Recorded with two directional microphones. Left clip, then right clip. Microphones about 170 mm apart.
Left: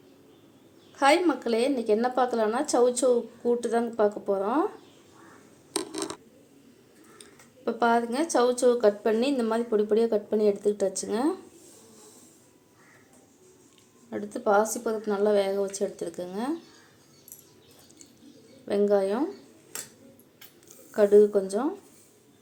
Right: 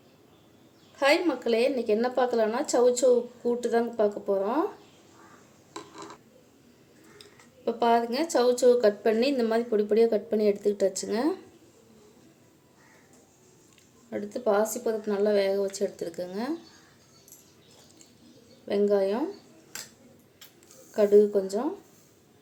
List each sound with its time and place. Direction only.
0.9 s a woman's voice: centre (ahead or behind)
5.7 s a sound: 90° left
7.2 s a woman's voice: centre (ahead or behind)
14.1 s a woman's voice: 5° right (ahead or behind)
18.7 s a woman's voice: 5° right (ahead or behind)
20.9 s a woman's voice: centre (ahead or behind)